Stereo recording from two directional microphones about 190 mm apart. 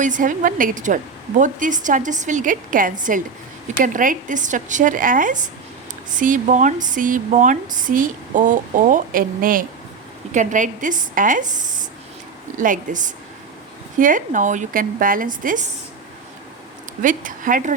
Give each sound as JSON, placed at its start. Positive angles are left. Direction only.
{"t": 0.0, "sound": "speech", "side_deg": -45}
{"t": 12.5, "sound": "speech", "side_deg": -45}
{"t": 17.0, "sound": "speech", "side_deg": -45}